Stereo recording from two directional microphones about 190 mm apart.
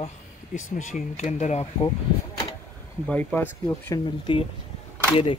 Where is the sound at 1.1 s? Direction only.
35° left (ahead or behind).